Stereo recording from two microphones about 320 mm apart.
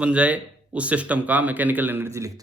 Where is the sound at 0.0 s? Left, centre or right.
Centre.